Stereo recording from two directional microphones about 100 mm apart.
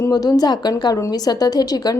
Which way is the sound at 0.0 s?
40° left (ahead or behind).